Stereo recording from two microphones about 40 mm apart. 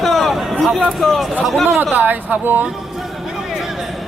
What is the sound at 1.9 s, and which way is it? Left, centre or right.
Speech, right.